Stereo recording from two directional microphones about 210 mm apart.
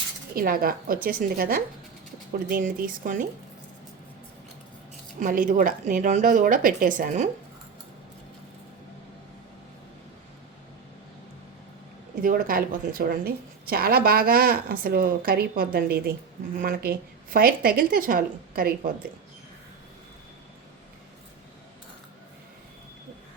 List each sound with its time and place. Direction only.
0.3 s a woman's voice: 45° right (ahead or behind)
5.2 s a woman's voice: 40° right (ahead or behind)
12.2 s a woman's voice: 40° right (ahead or behind)